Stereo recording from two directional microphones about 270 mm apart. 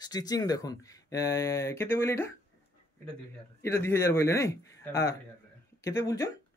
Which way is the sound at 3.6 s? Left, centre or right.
Centre.